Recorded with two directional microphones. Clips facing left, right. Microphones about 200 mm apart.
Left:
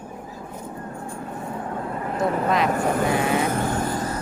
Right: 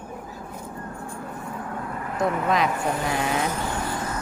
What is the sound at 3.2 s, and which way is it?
Vehicle, 55° left (ahead or behind).